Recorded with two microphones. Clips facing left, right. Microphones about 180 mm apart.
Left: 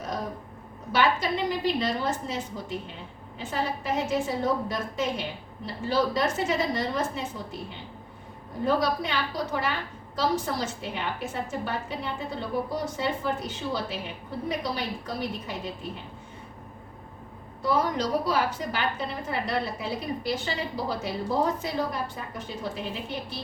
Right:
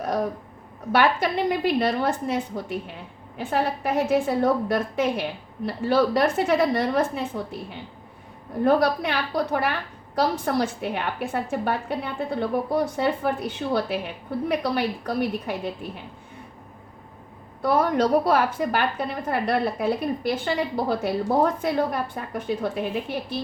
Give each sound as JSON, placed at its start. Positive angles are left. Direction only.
{"t": 0.9, "sound": "a woman's voice", "side_deg": -60}
{"t": 8.6, "sound": "a woman's voice", "side_deg": -60}
{"t": 17.6, "sound": "a woman's voice", "side_deg": -60}